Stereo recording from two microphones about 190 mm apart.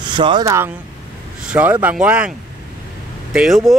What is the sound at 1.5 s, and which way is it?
Speech, 10° right (ahead or behind).